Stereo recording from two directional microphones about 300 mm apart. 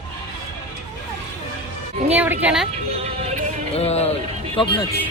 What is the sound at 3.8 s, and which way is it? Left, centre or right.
Speech, left.